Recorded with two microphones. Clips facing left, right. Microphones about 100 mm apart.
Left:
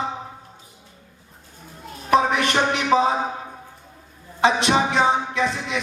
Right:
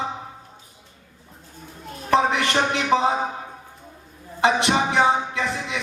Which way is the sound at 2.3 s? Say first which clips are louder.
Left 1 dB; 20° left (ahead or behind).